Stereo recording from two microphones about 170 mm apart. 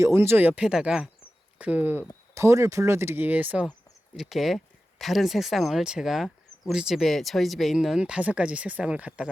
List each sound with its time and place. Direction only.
0.0 s speech: 15° right (ahead or behind)